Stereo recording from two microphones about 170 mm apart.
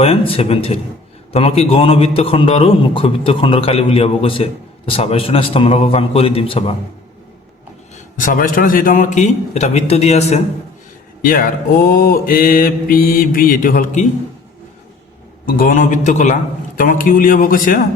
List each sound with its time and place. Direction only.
0.0 s a man's voice: 35° left (ahead or behind)
8.2 s a man's voice: 55° left (ahead or behind)
11.2 s mantra: 60° left (ahead or behind)
15.4 s mantra: 55° left (ahead or behind)